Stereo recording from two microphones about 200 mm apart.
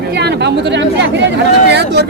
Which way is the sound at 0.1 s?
55° right (ahead or behind).